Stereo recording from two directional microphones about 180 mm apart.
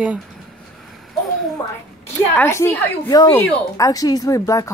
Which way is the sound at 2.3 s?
15° left (ahead or behind).